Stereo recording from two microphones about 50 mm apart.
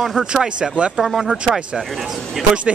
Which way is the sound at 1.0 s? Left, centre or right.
Centre.